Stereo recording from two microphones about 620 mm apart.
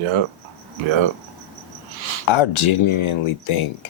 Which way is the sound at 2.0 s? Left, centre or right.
Right.